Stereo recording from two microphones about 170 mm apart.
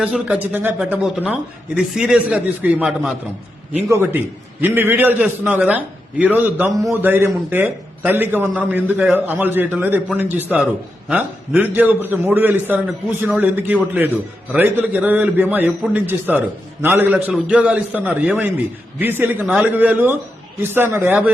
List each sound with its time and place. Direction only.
0.0 s speech: 5° right (ahead or behind)
3.8 s a man's voice: 15° right (ahead or behind)